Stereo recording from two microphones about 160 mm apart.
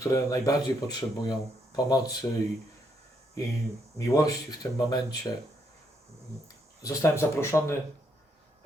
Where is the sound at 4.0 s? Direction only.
20° left (ahead or behind).